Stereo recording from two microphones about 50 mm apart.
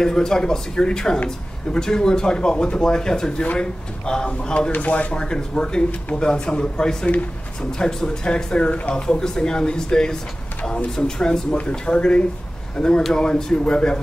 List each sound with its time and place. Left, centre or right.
0.0 s speech: centre